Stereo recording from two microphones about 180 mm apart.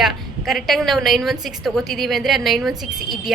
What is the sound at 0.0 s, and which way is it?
A woman's voice, centre (ahead or behind).